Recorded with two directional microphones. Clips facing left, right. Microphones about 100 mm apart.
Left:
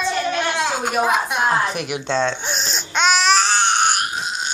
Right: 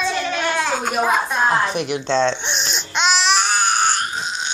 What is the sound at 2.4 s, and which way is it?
Baby cry, 40° left (ahead or behind).